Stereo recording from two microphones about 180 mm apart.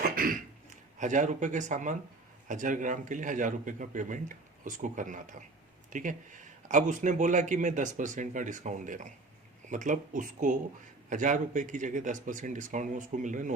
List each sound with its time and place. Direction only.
0.0 s throat clearing: 50° right (ahead or behind)
0.9 s a man's voice: 45° right (ahead or behind)